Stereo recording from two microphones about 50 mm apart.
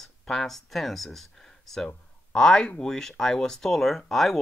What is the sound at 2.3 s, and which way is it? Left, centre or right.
Speech, centre.